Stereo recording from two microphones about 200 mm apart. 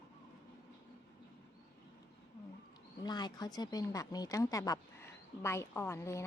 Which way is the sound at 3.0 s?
20° left (ahead or behind).